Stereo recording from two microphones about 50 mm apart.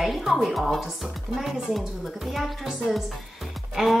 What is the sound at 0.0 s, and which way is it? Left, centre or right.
Speech, centre.